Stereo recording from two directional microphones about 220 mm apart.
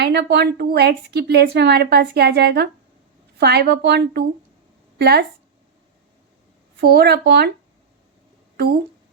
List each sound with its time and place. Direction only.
0.0 s a woman's voice: 50° right (ahead or behind)
6.7 s a woman's voice: 45° right (ahead or behind)
8.5 s speech: 45° right (ahead or behind)